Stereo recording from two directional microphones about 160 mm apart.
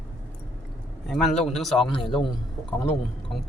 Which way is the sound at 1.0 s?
Centre (ahead or behind).